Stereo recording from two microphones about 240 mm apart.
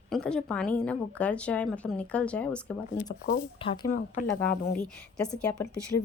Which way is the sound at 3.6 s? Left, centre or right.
Left.